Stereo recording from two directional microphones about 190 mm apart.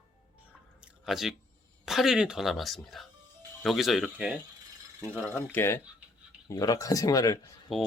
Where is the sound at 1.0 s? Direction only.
Centre (ahead or behind).